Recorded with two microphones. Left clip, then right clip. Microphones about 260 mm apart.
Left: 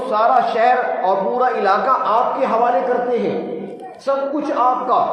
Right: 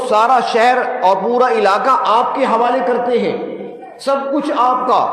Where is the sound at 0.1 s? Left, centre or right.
Right.